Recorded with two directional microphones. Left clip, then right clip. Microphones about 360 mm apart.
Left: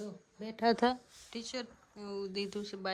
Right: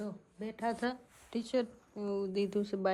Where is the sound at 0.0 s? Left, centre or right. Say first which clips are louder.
Right 2 dB; centre.